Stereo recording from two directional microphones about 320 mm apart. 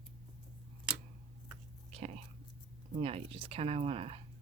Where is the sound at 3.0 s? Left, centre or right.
Centre.